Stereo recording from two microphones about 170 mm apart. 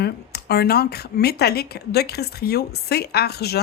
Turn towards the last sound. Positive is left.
turn(degrees=70)  # may be behind; listen again after turning